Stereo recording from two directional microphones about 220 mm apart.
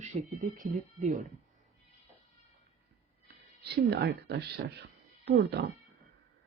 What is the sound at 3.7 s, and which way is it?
Speech, 45° right (ahead or behind).